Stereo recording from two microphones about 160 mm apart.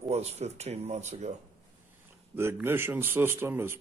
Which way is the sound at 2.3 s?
15° right (ahead or behind).